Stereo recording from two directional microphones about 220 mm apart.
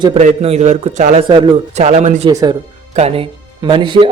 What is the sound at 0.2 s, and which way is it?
A man's voice, 30° right (ahead or behind).